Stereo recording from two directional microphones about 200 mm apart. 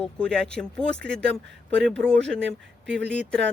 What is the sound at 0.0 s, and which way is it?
Speech, 5° left (ahead or behind).